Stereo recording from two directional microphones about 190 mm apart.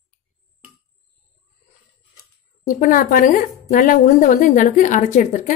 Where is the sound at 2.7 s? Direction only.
45° left (ahead or behind).